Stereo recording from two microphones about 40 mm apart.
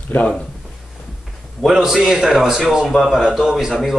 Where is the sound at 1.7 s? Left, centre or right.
Centre.